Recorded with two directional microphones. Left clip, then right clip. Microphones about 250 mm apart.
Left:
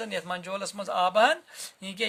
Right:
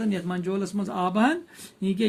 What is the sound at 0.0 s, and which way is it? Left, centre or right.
Speech, left.